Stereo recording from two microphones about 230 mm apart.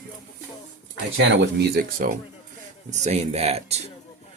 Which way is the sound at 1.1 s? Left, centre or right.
Right.